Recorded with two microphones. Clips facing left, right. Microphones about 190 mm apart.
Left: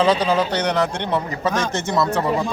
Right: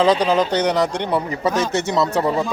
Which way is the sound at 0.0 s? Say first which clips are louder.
Right 2 dB; 15° right (ahead or behind).